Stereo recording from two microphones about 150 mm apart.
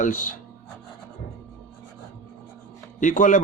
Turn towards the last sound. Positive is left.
turn(degrees=60)  # may be behind; listen again after turning